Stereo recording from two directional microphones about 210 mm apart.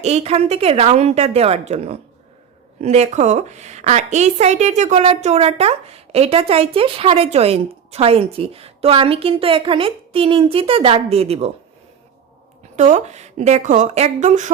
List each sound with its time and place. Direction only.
0.0 s a woman's voice: 30° right (ahead or behind)
12.7 s a woman's voice: 35° right (ahead or behind)